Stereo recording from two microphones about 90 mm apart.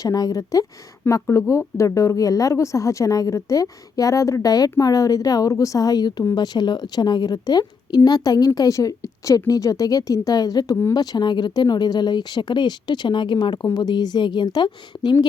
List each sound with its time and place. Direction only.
0.0 s a woman's voice: 45° left (ahead or behind)